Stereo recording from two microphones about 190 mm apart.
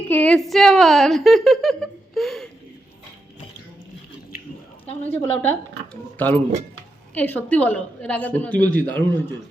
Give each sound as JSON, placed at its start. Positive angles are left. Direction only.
{"t": 0.1, "sound": "a woman's voice", "side_deg": 5}
{"t": 5.0, "sound": "a woman's voice", "side_deg": 10}